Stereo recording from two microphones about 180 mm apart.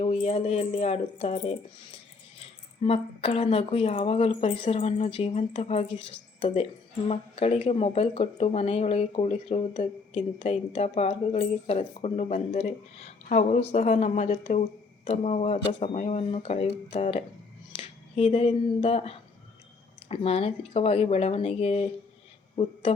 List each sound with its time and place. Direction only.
0.0 s a woman's voice: 35° left (ahead or behind)